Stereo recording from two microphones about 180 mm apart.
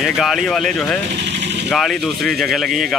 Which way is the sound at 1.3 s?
75° right (ahead or behind).